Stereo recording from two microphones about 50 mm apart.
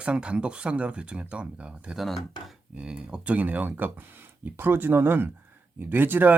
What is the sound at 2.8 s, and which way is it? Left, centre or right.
Speech, right.